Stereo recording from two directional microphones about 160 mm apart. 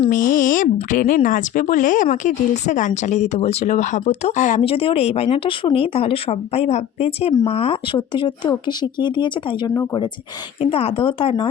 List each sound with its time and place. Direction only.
0.1 s speech: 55° left (ahead or behind)
4.6 s speech: 35° left (ahead or behind)
10.6 s speech: 40° left (ahead or behind)